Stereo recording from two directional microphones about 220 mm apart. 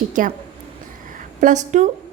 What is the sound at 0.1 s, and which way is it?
Speech, 35° right (ahead or behind).